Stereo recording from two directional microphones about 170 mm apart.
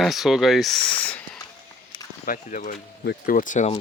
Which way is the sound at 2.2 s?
50° left (ahead or behind).